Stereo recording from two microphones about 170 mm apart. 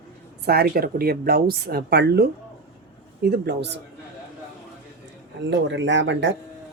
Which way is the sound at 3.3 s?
75° right (ahead or behind).